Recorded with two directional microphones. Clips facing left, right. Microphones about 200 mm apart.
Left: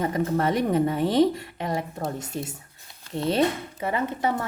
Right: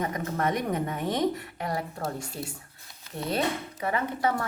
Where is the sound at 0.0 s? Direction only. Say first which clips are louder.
Left 5 dB; 30° left (ahead or behind).